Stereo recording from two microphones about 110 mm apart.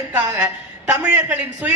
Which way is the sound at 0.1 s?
20° right (ahead or behind).